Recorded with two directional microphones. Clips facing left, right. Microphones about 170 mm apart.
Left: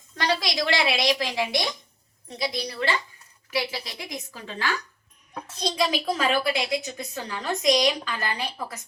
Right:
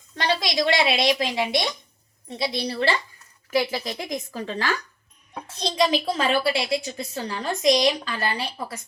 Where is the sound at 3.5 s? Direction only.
50° right (ahead or behind).